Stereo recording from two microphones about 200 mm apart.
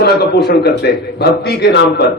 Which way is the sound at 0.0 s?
55° left (ahead or behind).